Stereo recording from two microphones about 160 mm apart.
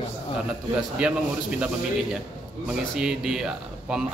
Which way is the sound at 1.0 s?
5° right (ahead or behind).